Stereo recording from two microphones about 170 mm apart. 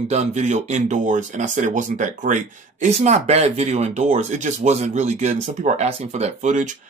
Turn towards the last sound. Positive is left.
turn(degrees=-45)  # may be behind; listen again after turning